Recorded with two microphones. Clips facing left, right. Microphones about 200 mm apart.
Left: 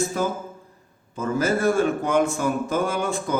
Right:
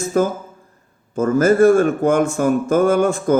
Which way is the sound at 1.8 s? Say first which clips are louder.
Right 5 dB; 45° right (ahead or behind).